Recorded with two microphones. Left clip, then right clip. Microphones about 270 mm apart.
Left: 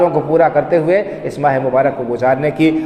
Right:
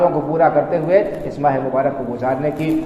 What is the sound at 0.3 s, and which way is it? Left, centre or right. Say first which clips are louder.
A man's voice: left 5 dB; left.